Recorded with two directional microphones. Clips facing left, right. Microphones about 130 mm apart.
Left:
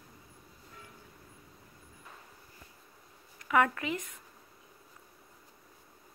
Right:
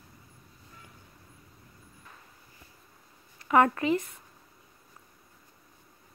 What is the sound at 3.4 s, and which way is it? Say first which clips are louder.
Speech: right 5 dB; 35° right (ahead or behind).